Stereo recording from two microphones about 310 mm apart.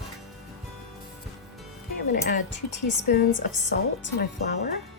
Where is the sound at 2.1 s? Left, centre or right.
Left.